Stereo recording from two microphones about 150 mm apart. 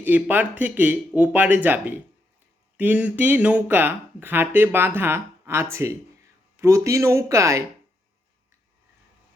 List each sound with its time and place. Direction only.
0.0 s speech: 10° right (ahead or behind)